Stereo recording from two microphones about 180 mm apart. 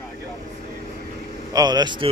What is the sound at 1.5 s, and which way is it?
Speech, 20° right (ahead or behind).